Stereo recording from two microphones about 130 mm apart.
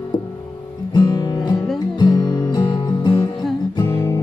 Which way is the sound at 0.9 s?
30° left (ahead or behind).